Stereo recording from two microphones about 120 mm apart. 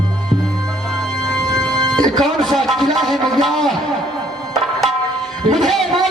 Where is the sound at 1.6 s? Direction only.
35° right (ahead or behind).